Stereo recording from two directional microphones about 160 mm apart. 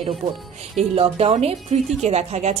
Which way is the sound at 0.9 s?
35° right (ahead or behind).